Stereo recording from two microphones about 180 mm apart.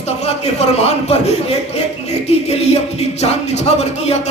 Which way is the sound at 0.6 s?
35° left (ahead or behind).